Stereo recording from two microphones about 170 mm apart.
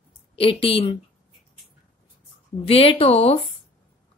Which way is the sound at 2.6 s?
35° left (ahead or behind).